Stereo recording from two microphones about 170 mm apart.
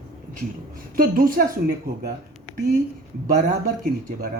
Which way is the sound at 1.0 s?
55° right (ahead or behind).